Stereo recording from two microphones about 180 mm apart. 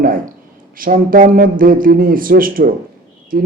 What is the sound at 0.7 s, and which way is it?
A man's voice, 50° right (ahead or behind).